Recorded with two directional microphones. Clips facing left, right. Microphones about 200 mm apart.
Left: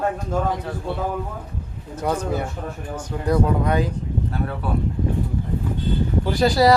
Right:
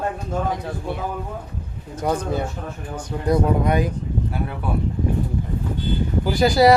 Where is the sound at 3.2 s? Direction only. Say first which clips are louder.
Right 1 dB; 15° right (ahead or behind).